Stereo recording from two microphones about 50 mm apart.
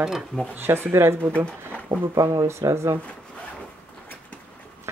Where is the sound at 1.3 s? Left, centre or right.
Left.